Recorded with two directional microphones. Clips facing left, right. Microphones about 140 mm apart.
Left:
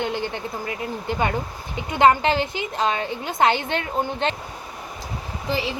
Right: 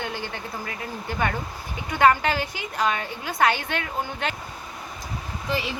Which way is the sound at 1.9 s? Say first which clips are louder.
Left 2 dB; 25° left (ahead or behind).